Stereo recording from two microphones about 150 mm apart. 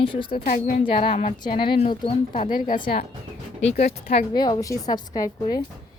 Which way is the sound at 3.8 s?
90° left.